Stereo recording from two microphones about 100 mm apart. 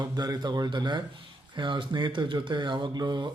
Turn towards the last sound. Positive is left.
turn(degrees=-45)  # may be behind; listen again after turning